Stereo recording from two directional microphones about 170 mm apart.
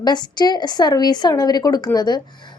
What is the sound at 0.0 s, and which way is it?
A woman's voice, 25° left (ahead or behind).